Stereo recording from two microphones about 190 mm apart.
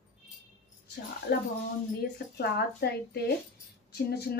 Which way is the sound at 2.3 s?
60° left (ahead or behind).